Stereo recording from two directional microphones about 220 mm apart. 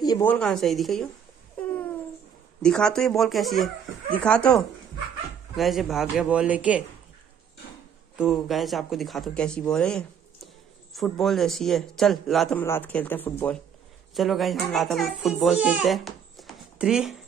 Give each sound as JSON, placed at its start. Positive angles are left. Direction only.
{"t": 0.0, "sound": "a woman's voice", "side_deg": 15}
{"t": 0.3, "sound": "speech", "side_deg": 5}
{"t": 2.6, "sound": "speech", "side_deg": 5}
{"t": 8.2, "sound": "a child's voice", "side_deg": 0}